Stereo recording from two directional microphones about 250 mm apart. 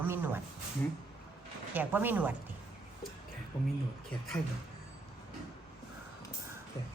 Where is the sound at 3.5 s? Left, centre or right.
Centre.